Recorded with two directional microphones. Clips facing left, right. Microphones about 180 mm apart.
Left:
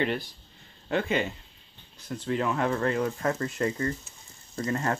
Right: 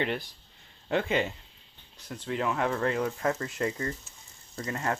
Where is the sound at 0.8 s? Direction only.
25° right (ahead or behind).